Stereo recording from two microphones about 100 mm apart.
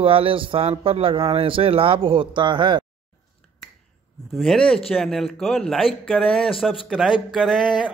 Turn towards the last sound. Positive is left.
turn(degrees=0)  # may be behind; listen again after turning